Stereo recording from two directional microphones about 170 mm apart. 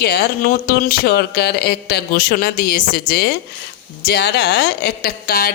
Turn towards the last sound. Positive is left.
turn(degrees=60)  # may be behind; listen again after turning